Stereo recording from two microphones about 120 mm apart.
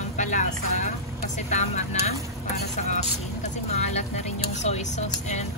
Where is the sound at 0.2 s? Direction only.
90° left; by 2.1 s 70° left (ahead or behind).